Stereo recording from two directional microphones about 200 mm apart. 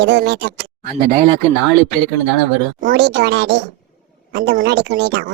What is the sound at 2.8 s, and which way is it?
Speech, 55° right (ahead or behind).